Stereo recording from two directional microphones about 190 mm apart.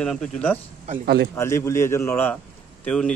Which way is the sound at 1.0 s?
60° right (ahead or behind).